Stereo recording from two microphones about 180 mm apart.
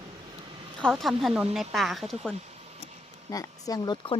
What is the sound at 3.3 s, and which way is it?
Speech, 20° left (ahead or behind).